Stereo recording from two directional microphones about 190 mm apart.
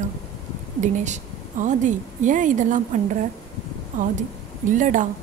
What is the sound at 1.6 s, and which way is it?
A woman's voice, 40° right (ahead or behind).